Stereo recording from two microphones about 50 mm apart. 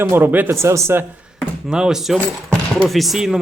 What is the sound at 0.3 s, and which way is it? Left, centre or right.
Speech, right.